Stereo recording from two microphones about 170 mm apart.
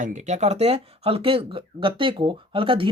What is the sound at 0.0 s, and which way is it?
Speech, 45° right (ahead or behind).